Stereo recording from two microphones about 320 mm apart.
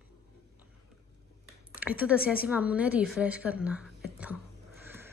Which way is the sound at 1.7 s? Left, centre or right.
Centre.